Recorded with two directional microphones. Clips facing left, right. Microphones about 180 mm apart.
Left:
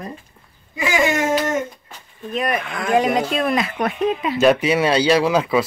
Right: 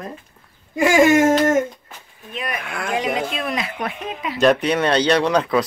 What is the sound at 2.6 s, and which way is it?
Speech, centre (ahead or behind).